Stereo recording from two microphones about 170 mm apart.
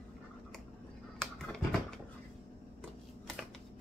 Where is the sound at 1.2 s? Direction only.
5° left (ahead or behind).